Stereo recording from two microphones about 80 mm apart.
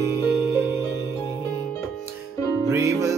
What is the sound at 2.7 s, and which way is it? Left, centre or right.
Music, right.